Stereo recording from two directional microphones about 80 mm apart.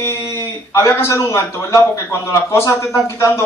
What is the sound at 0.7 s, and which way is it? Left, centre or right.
A man's voice, left.